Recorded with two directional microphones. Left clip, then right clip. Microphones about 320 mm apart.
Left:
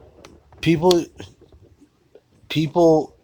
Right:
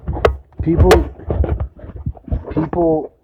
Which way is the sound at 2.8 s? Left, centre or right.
Left.